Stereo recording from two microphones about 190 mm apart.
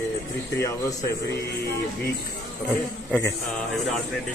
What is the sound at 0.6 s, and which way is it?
Speech, 15° left (ahead or behind).